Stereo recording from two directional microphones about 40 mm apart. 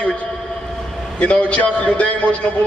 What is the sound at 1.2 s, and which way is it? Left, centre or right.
A man's voice, left.